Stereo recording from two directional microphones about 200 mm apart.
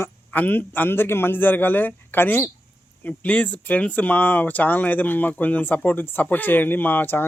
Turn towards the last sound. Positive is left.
turn(degrees=10)  # may be behind; listen again after turning